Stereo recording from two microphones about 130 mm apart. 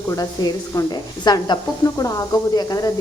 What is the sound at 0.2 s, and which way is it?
A woman's voice, 30° left (ahead or behind).